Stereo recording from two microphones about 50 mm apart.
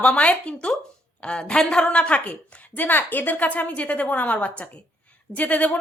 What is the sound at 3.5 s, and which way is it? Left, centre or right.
A woman's voice, left.